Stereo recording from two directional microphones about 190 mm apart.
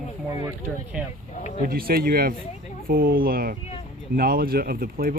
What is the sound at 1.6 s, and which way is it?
Speech, 50° right (ahead or behind).